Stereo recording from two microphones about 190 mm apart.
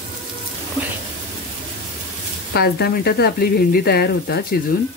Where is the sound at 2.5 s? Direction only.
55° left (ahead or behind).